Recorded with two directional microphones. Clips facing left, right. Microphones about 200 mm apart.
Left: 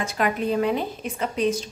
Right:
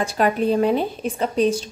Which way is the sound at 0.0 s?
30° right (ahead or behind).